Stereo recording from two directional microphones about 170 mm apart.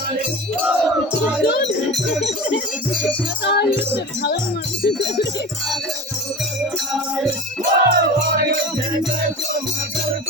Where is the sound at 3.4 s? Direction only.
80° left.